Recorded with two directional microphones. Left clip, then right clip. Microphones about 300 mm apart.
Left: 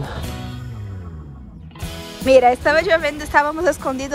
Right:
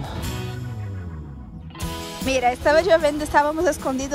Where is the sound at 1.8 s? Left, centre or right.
Centre.